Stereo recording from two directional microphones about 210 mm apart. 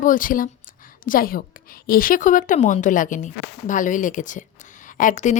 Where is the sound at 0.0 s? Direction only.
40° left (ahead or behind).